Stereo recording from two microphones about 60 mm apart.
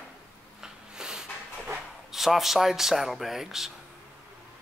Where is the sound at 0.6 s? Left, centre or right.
Centre.